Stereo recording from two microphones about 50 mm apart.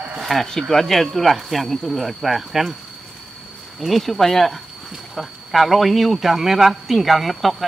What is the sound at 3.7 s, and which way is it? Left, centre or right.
Speech, centre.